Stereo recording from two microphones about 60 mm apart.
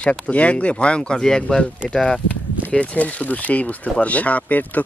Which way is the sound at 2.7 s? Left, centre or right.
Centre.